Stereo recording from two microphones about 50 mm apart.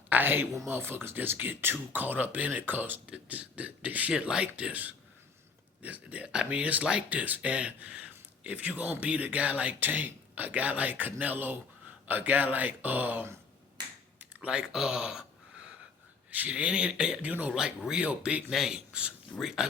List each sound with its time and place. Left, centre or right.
0.1 s a woman's voice: right
3.1 s speech: right
4.1 s speech: centre; by 13.2 s right
14.2 s typing: right
14.5 s speech: centre
16.3 s speech: right
19.4 s speech: centre